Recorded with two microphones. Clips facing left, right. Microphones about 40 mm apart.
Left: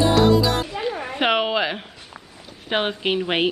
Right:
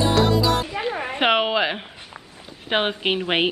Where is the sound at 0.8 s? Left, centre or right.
Centre.